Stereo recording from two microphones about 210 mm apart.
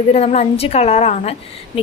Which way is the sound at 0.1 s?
30° left (ahead or behind).